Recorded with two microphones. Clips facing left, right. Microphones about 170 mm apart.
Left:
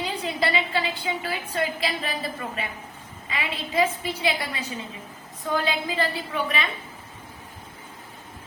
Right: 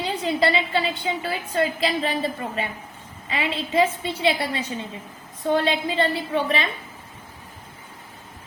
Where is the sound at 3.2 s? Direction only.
30° right (ahead or behind).